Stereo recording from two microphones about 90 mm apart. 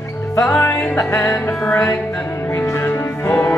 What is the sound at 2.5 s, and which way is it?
Music, 25° left (ahead or behind).